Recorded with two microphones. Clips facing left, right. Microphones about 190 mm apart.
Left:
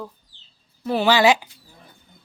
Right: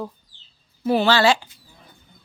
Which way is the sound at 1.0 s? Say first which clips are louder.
Left 3 dB; 15° left (ahead or behind).